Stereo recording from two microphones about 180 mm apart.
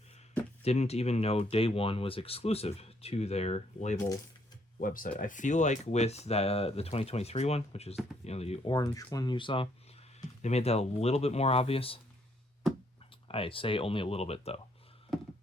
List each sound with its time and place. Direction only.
0.6 s speech: 35° left (ahead or behind)
4.8 s speech: 50° left (ahead or behind)
8.7 s speech: 20° left (ahead or behind)
10.2 s speech: 40° left (ahead or behind)
13.2 s speech: 30° left (ahead or behind)
15.1 s a sound: centre (ahead or behind)